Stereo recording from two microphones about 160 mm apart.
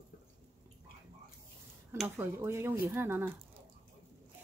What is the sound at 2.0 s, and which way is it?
Speech, 15° right (ahead or behind).